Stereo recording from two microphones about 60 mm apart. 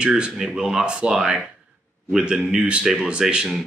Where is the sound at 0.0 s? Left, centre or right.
Centre.